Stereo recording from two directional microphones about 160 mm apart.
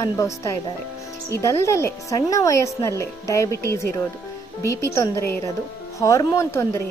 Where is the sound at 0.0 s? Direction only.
20° left (ahead or behind).